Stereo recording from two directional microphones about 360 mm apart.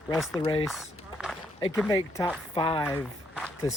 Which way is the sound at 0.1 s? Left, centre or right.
Centre.